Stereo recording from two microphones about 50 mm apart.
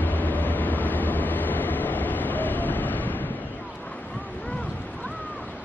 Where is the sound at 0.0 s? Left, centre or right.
Left.